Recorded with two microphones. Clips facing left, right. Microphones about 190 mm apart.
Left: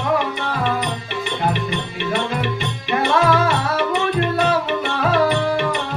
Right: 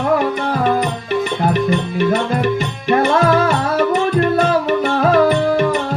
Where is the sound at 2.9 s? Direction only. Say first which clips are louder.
Right 4 dB; 40° right (ahead or behind).